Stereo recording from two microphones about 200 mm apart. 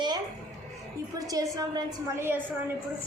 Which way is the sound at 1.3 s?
20° right (ahead or behind).